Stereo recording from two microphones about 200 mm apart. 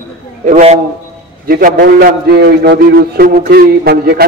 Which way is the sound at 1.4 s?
45° right (ahead or behind).